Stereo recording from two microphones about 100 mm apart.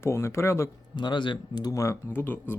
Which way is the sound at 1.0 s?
50° left (ahead or behind).